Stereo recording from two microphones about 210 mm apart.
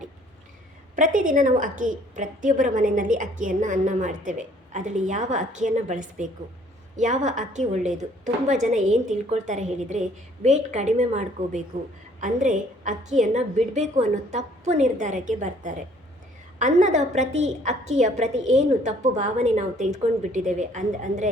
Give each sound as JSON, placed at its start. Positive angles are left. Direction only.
{"t": 0.9, "sound": "a woman's voice", "side_deg": -40}